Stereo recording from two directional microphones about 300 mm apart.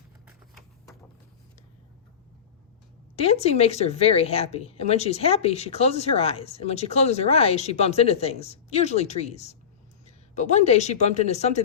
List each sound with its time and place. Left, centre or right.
3.2 s a woman's voice: left